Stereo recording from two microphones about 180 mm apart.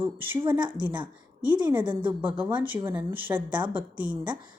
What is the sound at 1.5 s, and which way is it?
A woman's voice, 25° right (ahead or behind).